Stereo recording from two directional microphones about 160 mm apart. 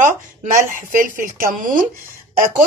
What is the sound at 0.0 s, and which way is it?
A woman's voice, 55° right (ahead or behind).